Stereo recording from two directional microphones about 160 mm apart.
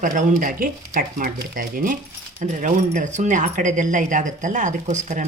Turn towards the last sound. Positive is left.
turn(degrees=-50)  # may be behind; listen again after turning